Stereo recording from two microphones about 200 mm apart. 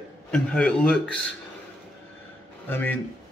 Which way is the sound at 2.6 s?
10° left (ahead or behind).